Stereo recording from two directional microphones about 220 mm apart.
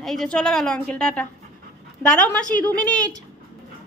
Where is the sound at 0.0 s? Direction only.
Centre (ahead or behind).